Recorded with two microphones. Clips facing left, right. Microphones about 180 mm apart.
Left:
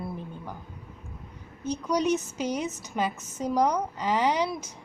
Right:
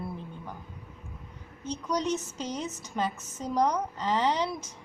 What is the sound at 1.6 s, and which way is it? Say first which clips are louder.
A woman's voice: left 4 dB; 10° left (ahead or behind).